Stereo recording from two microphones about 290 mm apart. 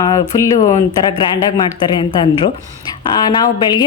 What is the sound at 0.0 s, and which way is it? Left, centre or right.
Speech, centre.